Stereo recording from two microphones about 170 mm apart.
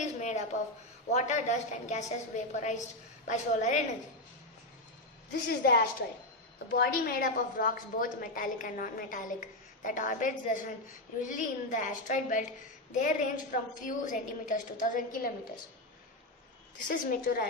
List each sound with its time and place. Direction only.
0.0 s a sound: 45° left (ahead or behind)
1.1 s a woman's voice: 45° left (ahead or behind)
5.5 s a woman's voice: 70° left (ahead or behind); by 15.3 s 50° left (ahead or behind)
16.8 s a woman's voice: 55° left (ahead or behind)